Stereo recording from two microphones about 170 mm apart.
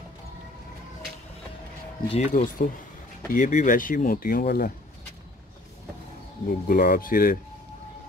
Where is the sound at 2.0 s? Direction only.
40° left (ahead or behind); by 4.7 s 60° left (ahead or behind).